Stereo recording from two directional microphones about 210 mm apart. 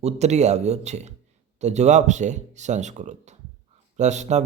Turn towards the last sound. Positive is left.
turn(degrees=-35)  # may be behind; listen again after turning